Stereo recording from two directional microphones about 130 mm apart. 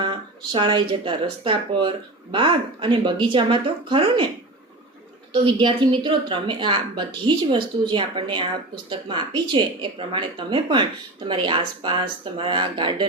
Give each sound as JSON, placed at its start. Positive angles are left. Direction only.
{"t": 0.0, "sound": "speech", "side_deg": -40}
{"t": 5.3, "sound": "speech", "side_deg": -40}